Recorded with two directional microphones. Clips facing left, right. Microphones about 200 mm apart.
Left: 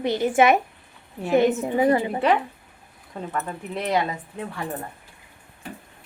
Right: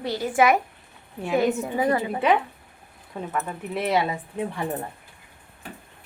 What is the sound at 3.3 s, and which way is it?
Speech, 5° right (ahead or behind).